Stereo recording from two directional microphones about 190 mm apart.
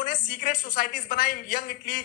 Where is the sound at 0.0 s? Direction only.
45° left (ahead or behind).